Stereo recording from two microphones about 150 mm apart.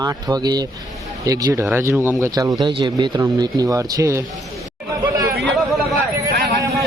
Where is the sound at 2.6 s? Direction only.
30° right (ahead or behind).